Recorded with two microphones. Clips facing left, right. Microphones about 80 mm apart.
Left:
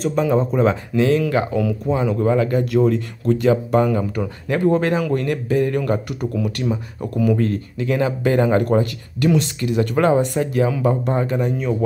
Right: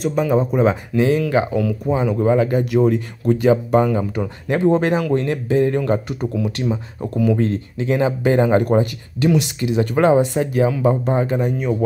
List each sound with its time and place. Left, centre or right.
0.0 s speech: centre
1.5 s speech: centre
1.9 s speech: centre
7.0 s speech: centre
7.3 s speech: right